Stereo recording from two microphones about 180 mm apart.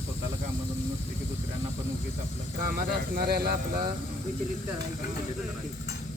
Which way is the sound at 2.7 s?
55° right (ahead or behind).